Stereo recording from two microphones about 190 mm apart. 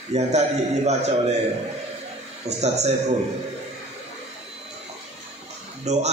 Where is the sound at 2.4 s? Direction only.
35° right (ahead or behind).